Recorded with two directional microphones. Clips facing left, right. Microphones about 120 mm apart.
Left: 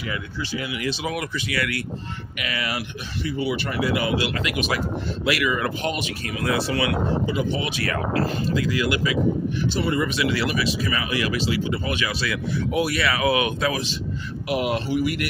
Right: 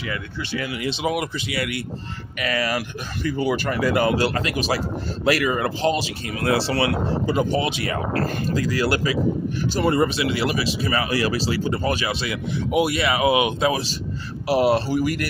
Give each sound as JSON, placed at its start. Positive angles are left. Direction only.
{"t": 0.1, "sound": "speech", "side_deg": -55}
{"t": 0.8, "sound": "speech", "side_deg": -25}
{"t": 2.4, "sound": "speech", "side_deg": -40}
{"t": 7.7, "sound": "speech", "side_deg": -25}
{"t": 8.1, "sound": "speech", "side_deg": -50}
{"t": 12.2, "sound": "speech", "side_deg": -25}
{"t": 14.4, "sound": "speech", "side_deg": -35}